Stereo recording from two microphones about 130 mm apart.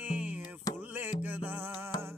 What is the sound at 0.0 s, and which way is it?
Music, 10° right (ahead or behind).